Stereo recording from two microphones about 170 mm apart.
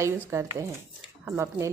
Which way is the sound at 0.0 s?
15° right (ahead or behind).